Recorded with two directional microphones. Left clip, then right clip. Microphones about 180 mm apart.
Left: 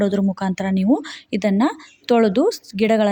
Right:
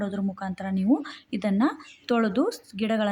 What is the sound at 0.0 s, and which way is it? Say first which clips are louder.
Speech: left 11 dB; 35° left (ahead or behind).